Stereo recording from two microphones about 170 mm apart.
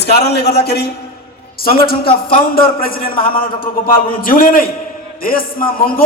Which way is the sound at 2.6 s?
60° left (ahead or behind).